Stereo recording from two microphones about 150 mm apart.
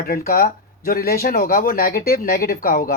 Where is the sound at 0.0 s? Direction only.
85° left.